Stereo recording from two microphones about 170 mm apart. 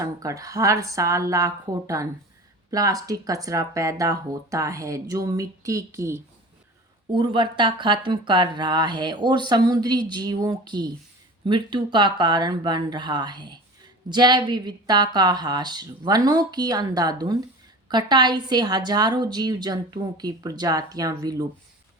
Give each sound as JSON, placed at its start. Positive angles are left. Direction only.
{"t": 0.0, "sound": "speech", "side_deg": -20}
{"t": 7.1, "sound": "speech", "side_deg": -25}